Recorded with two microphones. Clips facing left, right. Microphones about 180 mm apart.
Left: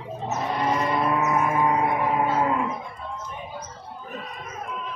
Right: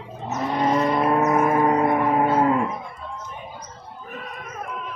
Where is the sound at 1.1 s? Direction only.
45° right (ahead or behind).